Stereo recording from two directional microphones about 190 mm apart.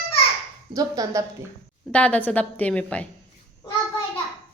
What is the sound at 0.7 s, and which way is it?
Speech, 20° right (ahead or behind).